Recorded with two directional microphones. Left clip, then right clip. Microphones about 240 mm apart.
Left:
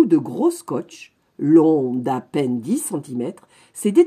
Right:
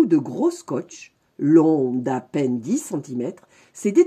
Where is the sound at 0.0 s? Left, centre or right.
Centre.